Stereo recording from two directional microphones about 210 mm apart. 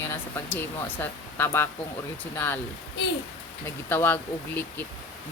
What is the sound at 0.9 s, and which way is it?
Speech, 10° left (ahead or behind).